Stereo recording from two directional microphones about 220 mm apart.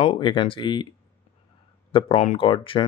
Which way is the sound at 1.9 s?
25° left (ahead or behind).